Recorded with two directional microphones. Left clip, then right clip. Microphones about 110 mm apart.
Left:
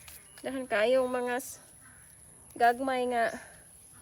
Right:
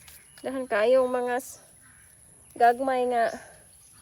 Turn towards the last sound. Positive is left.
turn(degrees=-20)  # may be behind; listen again after turning